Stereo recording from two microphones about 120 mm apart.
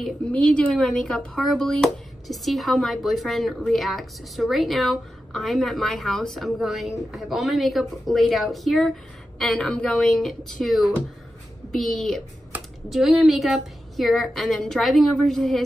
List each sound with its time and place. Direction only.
0.3 s speech: 10° left (ahead or behind)
12.5 s computer keyboard: 15° right (ahead or behind)
12.9 s speech: centre (ahead or behind)